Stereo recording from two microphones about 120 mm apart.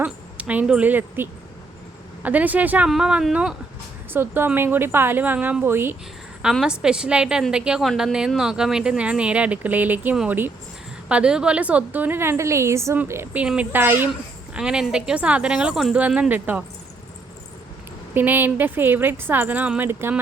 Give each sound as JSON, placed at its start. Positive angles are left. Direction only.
{"t": 0.0, "sound": "speech", "side_deg": -10}
{"t": 4.1, "sound": "speech", "side_deg": -15}
{"t": 6.4, "sound": "speech", "side_deg": -5}
{"t": 18.1, "sound": "speech", "side_deg": -15}